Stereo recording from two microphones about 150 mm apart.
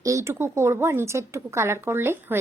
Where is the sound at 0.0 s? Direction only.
20° right (ahead or behind).